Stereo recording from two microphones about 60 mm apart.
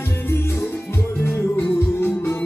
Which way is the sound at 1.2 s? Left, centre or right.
Left.